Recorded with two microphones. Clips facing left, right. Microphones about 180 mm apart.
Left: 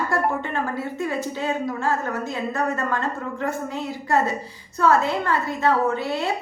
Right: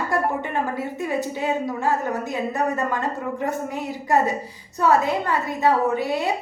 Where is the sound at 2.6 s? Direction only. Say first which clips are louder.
Right 1 dB; 15° right (ahead or behind).